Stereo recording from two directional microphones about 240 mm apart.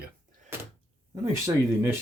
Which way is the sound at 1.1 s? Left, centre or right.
Centre.